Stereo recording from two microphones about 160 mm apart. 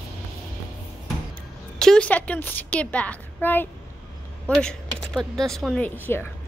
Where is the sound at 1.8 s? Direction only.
5° left (ahead or behind).